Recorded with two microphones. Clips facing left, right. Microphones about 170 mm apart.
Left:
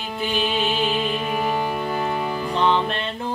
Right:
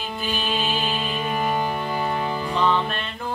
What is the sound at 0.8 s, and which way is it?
Music, 5° left (ahead or behind).